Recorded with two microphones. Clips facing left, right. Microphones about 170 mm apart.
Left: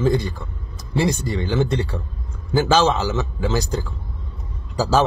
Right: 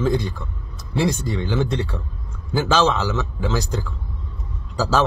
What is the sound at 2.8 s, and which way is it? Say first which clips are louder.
A man's voice: left 1 dB; 10° left (ahead or behind).